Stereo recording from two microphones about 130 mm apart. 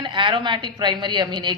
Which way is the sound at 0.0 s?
40° right (ahead or behind).